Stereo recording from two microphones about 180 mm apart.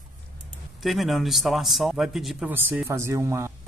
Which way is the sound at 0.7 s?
Centre (ahead or behind).